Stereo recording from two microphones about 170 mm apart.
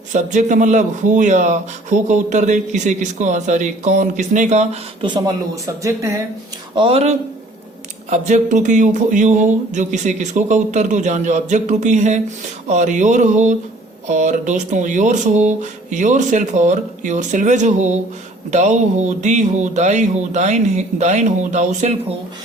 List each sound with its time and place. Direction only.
0.1 s speech: 45° right (ahead or behind); by 6.2 s 20° right (ahead or behind)
6.7 s speech: 35° right (ahead or behind)
8.1 s speech: 45° right (ahead or behind)